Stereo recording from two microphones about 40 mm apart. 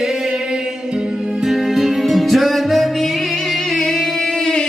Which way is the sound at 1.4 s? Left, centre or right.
Centre.